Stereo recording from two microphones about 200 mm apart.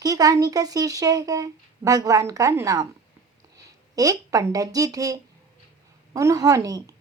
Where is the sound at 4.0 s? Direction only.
15° right (ahead or behind).